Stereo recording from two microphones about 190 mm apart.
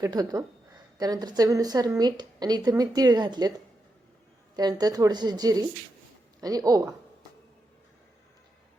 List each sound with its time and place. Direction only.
0.0 s speech: 20° right (ahead or behind)
4.5 s speech: 20° right (ahead or behind)